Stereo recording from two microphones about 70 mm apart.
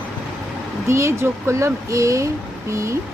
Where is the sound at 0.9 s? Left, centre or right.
Right.